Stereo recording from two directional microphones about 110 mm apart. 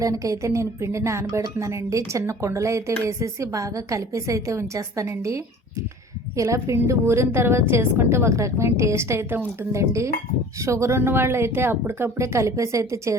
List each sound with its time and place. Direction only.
0.0 s speech: 30° right (ahead or behind)